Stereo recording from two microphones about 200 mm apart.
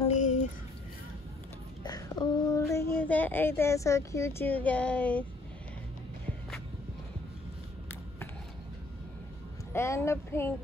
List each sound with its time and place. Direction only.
0.1 s a sound: 35° left (ahead or behind)
1.8 s speech: 20° left (ahead or behind)
9.7 s speech: 10° left (ahead or behind)